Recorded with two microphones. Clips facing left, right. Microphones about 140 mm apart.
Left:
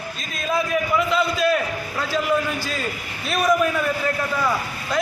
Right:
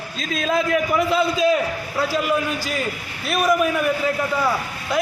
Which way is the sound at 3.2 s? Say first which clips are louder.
Right 1 dB; 5° right (ahead or behind).